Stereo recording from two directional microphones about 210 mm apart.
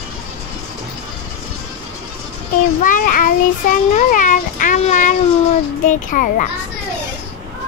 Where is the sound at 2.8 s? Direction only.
40° left (ahead or behind).